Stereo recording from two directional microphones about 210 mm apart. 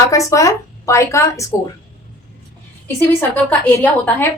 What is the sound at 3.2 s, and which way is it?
A woman's voice, 10° left (ahead or behind).